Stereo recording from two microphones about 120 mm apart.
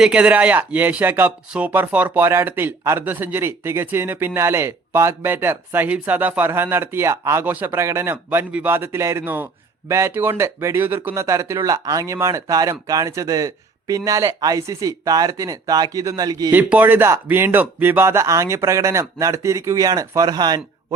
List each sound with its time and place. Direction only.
0.0 s speech: 10° right (ahead or behind); by 16.5 s 30° right (ahead or behind)
16.5 s speech: 15° right (ahead or behind); by 20.6 s 35° right (ahead or behind)